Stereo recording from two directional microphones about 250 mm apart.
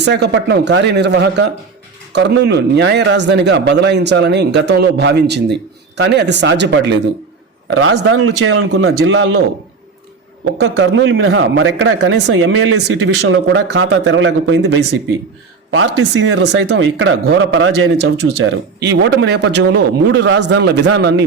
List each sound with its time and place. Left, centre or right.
0.0 s speech: right
7.7 s a man's voice: right
10.6 s speech: right